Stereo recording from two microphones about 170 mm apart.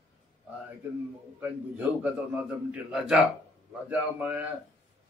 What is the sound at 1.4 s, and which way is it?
A man's voice, 10° right (ahead or behind).